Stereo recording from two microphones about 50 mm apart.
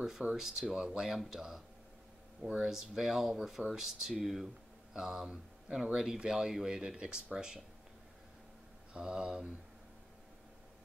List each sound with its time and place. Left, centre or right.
0.3 s speech: centre
2.6 s speech: centre
8.9 s speech: centre